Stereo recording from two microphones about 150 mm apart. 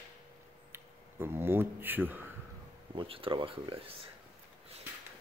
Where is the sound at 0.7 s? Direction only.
15° right (ahead or behind).